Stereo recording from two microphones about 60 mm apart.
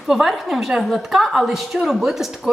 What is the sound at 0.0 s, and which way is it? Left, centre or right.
Speech, centre.